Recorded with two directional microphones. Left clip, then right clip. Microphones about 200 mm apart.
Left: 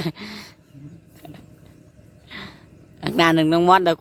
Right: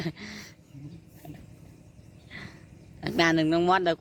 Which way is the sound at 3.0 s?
20° left (ahead or behind).